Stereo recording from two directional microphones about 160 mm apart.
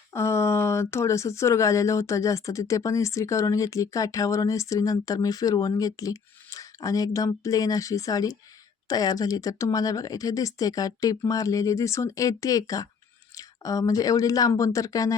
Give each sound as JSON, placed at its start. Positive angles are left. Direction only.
{"t": 0.1, "sound": "speech", "side_deg": 15}